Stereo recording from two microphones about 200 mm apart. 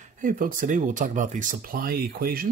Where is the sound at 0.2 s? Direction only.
40° right (ahead or behind).